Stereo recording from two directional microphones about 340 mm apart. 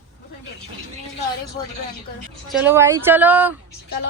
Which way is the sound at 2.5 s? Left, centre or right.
Centre.